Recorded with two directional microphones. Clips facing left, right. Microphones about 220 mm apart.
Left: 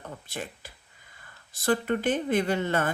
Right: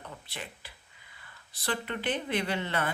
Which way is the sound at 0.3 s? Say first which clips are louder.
Left 6 dB; 45° left (ahead or behind).